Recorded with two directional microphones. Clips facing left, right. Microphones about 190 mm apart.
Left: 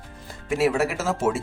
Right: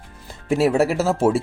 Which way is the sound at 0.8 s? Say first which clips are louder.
Right 6 dB; 30° right (ahead or behind).